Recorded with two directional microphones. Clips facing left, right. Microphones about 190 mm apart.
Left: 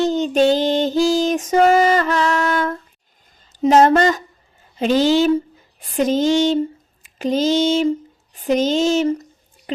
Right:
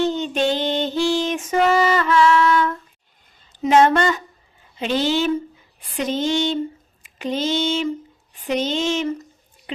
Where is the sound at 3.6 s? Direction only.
40° left (ahead or behind).